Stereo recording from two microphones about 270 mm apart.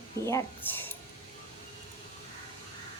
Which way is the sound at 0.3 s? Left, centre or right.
Centre.